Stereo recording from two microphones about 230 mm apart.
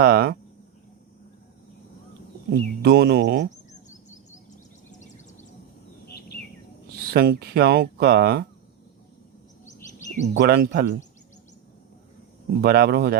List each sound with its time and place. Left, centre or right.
0.0 s speech: right
2.5 s speech: right
3.7 s fowl: left
4.9 s a sound: left
6.1 s bird: left
6.9 s speech: right
10.3 s speech: right
12.6 s speech: right